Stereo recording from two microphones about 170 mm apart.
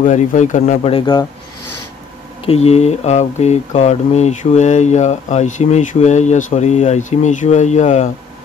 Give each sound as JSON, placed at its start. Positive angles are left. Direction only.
{"t": 0.0, "sound": "speech", "side_deg": 50}
{"t": 0.9, "sound": "speech", "side_deg": 30}
{"t": 2.4, "sound": "speech", "side_deg": 35}